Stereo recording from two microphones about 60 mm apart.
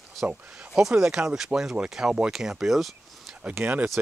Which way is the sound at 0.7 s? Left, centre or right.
Centre.